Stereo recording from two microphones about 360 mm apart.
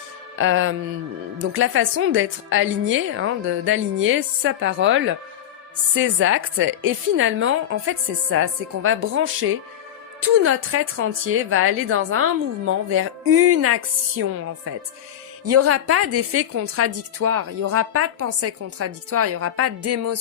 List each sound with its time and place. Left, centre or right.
0.3 s a woman's voice: right